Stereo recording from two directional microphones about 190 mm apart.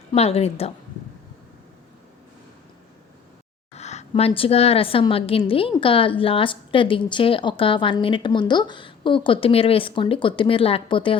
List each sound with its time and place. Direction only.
0.1 s a woman's voice: 35° left (ahead or behind)
3.8 s a woman's voice: 35° left (ahead or behind)